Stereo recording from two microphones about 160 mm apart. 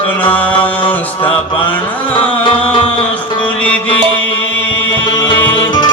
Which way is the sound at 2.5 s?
35° left (ahead or behind).